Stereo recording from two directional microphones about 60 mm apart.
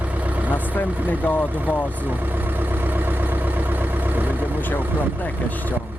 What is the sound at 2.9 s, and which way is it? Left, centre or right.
Vehicle, right.